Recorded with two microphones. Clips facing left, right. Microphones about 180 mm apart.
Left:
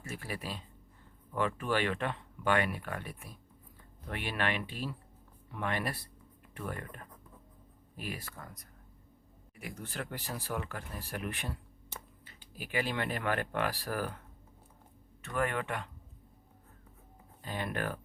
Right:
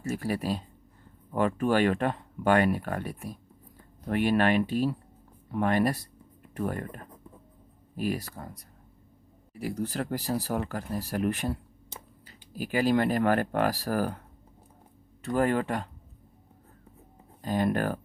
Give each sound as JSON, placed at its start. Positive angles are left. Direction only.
{"t": 0.0, "sound": "speech", "side_deg": -40}
{"t": 15.2, "sound": "speech", "side_deg": -35}
{"t": 17.4, "sound": "speech", "side_deg": -40}